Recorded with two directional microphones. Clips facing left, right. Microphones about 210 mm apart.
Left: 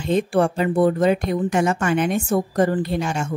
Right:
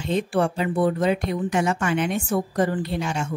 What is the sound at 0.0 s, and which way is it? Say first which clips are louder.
A woman's voice: left 4 dB; 45° left (ahead or behind).